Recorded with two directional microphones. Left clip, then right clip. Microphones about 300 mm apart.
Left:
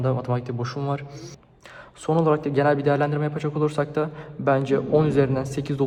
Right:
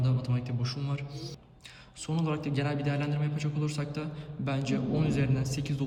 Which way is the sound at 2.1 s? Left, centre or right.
Left.